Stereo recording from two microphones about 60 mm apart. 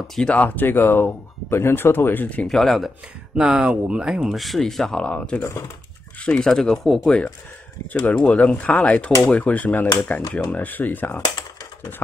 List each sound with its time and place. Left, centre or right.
0.3 s speech: left
2.4 s speech: centre
3.3 s speech: centre
4.4 s speech: centre
7.9 s speech: left